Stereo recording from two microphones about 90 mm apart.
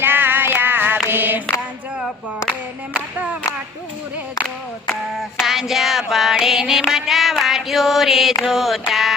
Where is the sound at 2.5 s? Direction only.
15° right (ahead or behind).